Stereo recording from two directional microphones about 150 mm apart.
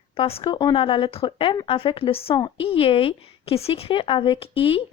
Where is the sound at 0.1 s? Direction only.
40° left (ahead or behind).